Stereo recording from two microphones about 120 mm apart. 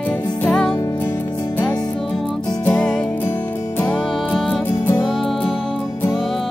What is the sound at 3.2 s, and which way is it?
Music, 20° left (ahead or behind).